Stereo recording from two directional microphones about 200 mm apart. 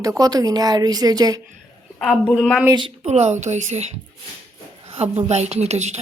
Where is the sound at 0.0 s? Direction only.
20° right (ahead or behind).